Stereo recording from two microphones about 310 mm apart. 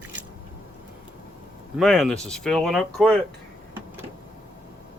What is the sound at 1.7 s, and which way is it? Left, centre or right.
Speech, centre.